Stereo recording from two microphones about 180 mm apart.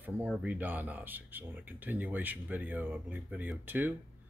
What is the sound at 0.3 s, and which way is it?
Speech, 5° right (ahead or behind).